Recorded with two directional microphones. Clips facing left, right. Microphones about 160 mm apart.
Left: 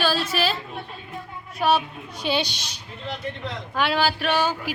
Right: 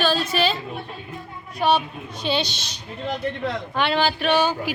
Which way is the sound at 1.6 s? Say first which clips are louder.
Right 1 dB; 5° left (ahead or behind).